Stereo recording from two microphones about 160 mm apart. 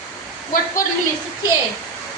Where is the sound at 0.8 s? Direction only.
60° left (ahead or behind).